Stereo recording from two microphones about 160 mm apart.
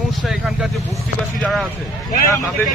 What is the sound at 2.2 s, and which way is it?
Speech, 15° left (ahead or behind).